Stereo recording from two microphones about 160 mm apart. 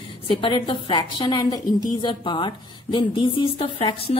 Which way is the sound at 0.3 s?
30° left (ahead or behind).